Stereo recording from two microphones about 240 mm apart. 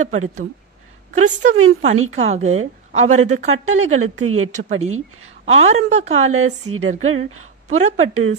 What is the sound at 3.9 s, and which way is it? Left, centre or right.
Speech, right.